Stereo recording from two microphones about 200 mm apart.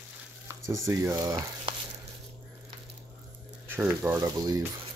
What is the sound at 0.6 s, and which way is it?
Speech, 15° right (ahead or behind).